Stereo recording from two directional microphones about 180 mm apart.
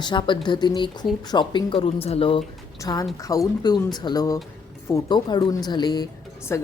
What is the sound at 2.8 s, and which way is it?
Speech, 20° left (ahead or behind).